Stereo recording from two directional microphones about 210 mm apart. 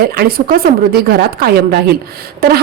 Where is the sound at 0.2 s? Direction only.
45° right (ahead or behind).